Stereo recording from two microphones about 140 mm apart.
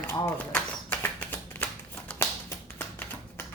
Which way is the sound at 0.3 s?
15° left (ahead or behind).